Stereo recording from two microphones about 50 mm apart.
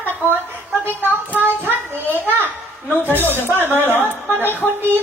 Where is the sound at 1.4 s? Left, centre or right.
Right.